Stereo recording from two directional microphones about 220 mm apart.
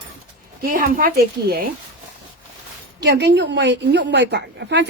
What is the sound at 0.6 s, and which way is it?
Speech, 40° right (ahead or behind).